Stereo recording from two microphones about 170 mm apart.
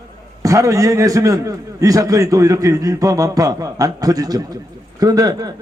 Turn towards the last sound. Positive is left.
turn(degrees=-20)  # may be behind; listen again after turning